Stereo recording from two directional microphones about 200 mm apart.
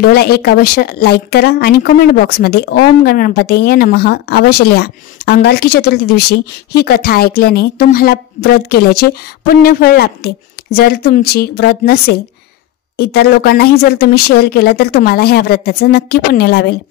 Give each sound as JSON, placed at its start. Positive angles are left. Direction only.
{"t": 0.0, "sound": "speech", "side_deg": 50}